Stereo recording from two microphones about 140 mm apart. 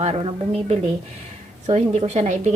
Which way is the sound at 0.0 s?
45° right (ahead or behind).